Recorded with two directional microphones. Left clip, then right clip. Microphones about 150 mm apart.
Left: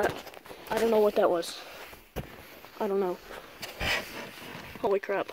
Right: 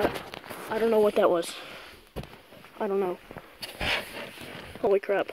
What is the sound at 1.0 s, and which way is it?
Speech, 10° right (ahead or behind).